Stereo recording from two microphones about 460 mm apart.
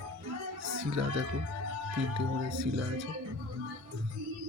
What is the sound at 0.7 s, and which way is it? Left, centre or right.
Speech, right.